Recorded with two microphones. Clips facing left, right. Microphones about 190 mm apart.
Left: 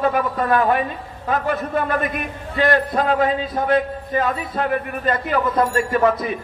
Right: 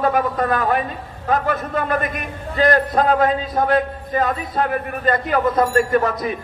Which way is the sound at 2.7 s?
40° right (ahead or behind).